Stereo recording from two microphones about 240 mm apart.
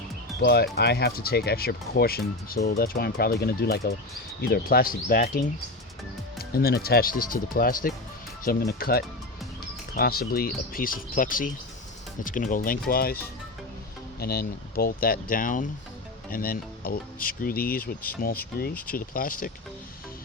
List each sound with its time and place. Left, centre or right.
0.4 s speech: left
6.4 s speech: left
14.2 s speech: left